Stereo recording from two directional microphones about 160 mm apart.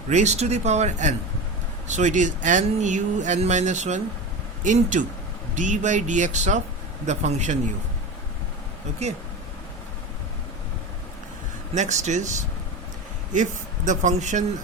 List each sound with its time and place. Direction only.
0.1 s speech: 45° right (ahead or behind)
11.7 s speech: 45° right (ahead or behind)